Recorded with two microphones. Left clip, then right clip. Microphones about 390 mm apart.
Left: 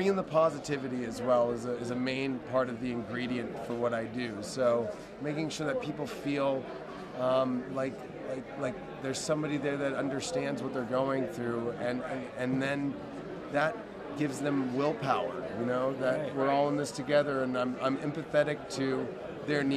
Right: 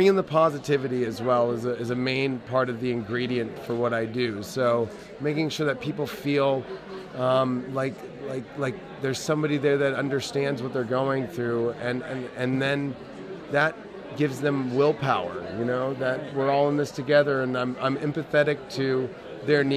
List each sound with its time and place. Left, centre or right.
0.0 s a man's voice: right